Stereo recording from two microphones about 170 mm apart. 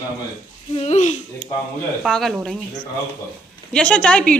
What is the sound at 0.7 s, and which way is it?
Speech, 40° left (ahead or behind).